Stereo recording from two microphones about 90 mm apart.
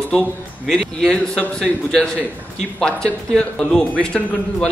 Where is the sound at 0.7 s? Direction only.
5° left (ahead or behind).